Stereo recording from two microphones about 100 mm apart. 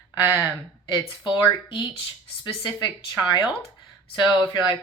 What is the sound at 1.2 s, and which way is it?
Speech, 50° left (ahead or behind).